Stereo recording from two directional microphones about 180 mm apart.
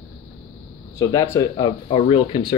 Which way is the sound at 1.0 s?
20° left (ahead or behind).